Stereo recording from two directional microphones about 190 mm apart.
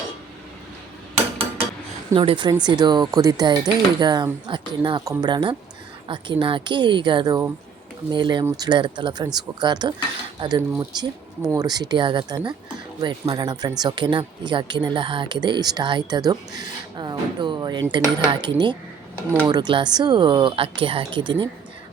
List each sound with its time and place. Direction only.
2.1 s speech: 25° right (ahead or behind)